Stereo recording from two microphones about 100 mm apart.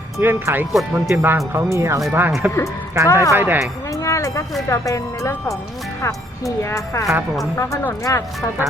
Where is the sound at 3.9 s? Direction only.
30° left (ahead or behind).